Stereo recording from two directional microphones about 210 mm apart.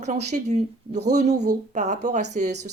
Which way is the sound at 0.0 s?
35° right (ahead or behind).